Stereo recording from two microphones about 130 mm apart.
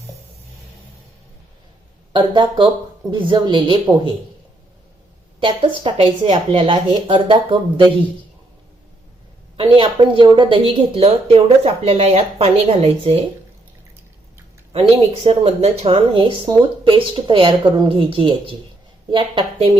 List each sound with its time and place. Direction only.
2.1 s speech: 40° right (ahead or behind)
5.4 s speech: 40° right (ahead or behind)
9.6 s speech: 40° right (ahead or behind)
14.7 s speech: 50° right (ahead or behind)